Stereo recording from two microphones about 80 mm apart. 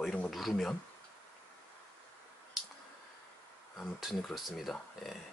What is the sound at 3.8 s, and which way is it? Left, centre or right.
Speech, centre.